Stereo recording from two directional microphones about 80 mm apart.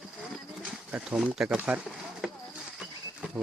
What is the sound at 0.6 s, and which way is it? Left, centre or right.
Speech, centre.